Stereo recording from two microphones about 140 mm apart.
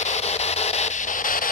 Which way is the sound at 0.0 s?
50° left (ahead or behind).